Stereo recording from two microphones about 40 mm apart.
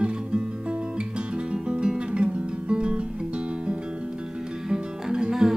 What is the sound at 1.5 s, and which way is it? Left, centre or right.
Guitar, right.